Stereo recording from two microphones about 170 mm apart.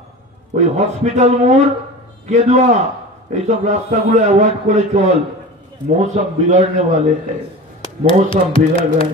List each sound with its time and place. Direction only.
0.6 s a man's voice: 40° right (ahead or behind)
8.1 s speech: 30° left (ahead or behind)